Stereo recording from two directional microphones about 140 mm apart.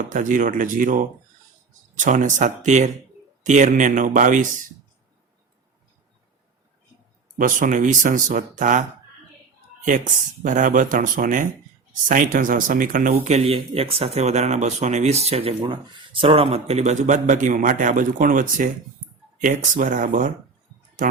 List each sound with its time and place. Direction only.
0.1 s speech: 70° right (ahead or behind)
7.3 s speech: 70° right (ahead or behind)
10.4 s speech: 65° right (ahead or behind)
13.2 s speech: 50° right (ahead or behind); by 20.3 s 70° right (ahead or behind)